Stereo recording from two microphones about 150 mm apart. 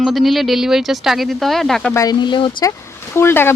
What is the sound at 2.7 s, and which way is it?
Speech, 15° left (ahead or behind).